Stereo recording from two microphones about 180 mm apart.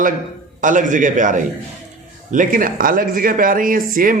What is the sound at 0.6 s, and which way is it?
Speech, 45° right (ahead or behind).